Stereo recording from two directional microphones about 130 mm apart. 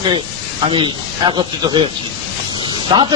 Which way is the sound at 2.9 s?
35° right (ahead or behind).